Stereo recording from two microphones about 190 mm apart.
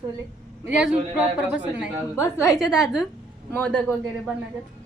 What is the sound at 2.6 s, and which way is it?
Speech, centre (ahead or behind).